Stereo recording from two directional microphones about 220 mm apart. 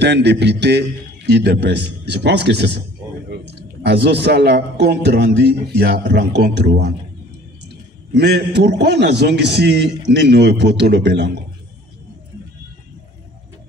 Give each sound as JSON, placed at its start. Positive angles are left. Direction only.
{"t": 0.0, "sound": "a man's voice", "side_deg": -50}
{"t": 3.8, "sound": "a man's voice", "side_deg": -50}
{"t": 8.2, "sound": "a man's voice", "side_deg": -45}